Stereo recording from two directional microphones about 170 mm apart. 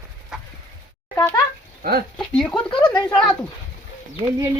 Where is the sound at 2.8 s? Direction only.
25° left (ahead or behind).